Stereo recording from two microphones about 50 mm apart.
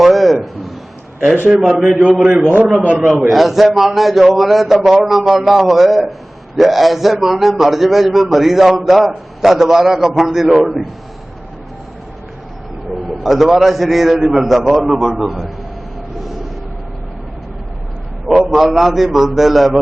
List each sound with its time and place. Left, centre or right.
0.0 s a sound: centre
1.6 s a man's voice: centre
2.8 s a man's voice: right
3.1 s a man's voice: centre
13.2 s a man's voice: centre
18.3 s a man's voice: centre